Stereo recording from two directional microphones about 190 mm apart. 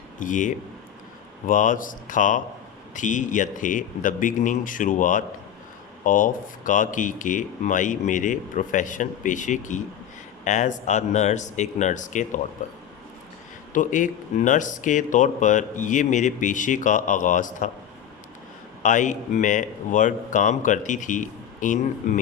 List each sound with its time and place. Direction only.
0.2 s speech: 45° left (ahead or behind)
13.7 s speech: 40° left (ahead or behind)
18.8 s speech: 40° left (ahead or behind)